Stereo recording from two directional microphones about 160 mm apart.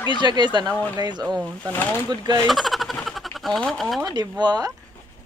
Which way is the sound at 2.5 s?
Centre (ahead or behind).